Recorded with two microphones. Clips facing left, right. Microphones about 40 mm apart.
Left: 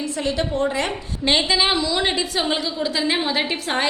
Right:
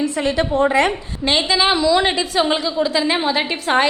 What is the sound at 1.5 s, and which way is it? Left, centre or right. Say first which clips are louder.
A woman's voice: right 5 dB; centre.